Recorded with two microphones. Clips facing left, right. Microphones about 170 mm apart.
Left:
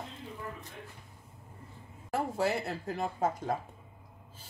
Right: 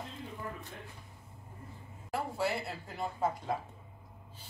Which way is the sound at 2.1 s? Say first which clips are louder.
Left 3 dB; 45° left (ahead or behind).